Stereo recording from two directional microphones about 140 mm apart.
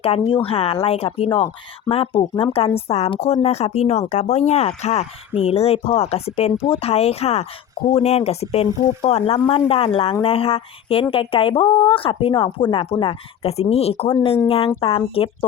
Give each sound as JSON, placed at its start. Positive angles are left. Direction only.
{"t": 0.0, "sound": "speech", "side_deg": 40}